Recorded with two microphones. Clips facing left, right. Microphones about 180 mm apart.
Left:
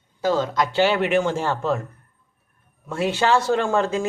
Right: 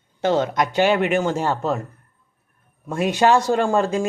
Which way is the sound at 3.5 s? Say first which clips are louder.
Right 2 dB; 40° right (ahead or behind).